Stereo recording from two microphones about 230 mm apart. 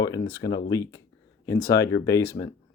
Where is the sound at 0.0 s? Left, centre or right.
Centre.